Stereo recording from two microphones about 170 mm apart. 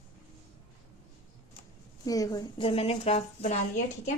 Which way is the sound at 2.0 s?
20° left (ahead or behind).